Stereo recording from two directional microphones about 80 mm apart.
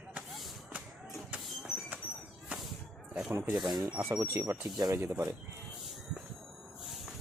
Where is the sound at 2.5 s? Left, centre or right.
Centre.